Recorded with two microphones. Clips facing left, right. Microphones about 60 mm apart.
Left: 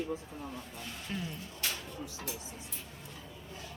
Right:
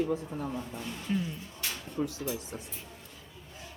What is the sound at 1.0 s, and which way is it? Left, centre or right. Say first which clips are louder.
Speech: right 7 dB; centre.